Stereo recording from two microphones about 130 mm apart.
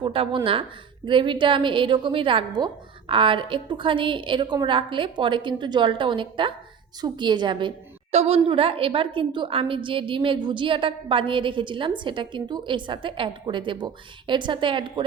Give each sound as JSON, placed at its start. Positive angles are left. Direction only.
{"t": 0.0, "sound": "a woman's voice", "side_deg": -45}
{"t": 8.1, "sound": "a woman's voice", "side_deg": -55}